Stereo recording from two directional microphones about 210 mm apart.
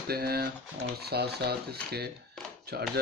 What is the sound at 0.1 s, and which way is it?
Speech, 50° right (ahead or behind).